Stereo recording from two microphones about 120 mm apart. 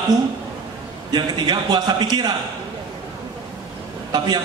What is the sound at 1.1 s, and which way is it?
A man's voice, 35° right (ahead or behind).